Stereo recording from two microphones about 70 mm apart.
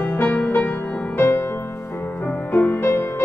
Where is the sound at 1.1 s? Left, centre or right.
Left.